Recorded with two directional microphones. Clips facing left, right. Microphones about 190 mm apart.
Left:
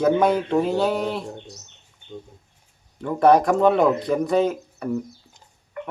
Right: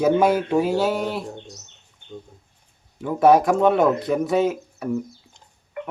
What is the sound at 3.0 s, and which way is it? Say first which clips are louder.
Speech: right 1 dB; 5° right (ahead or behind).